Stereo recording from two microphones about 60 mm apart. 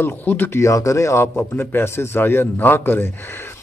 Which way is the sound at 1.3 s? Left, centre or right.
Left.